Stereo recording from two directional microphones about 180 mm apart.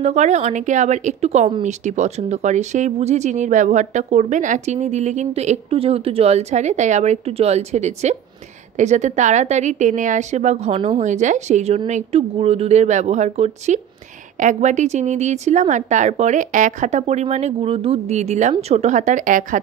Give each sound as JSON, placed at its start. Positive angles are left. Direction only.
{"t": 0.0, "sound": "speech", "side_deg": -40}